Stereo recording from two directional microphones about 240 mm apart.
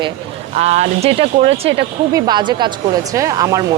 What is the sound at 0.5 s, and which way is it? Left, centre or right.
Speech, right.